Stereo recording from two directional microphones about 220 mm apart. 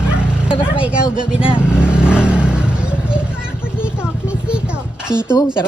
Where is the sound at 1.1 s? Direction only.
5° right (ahead or behind).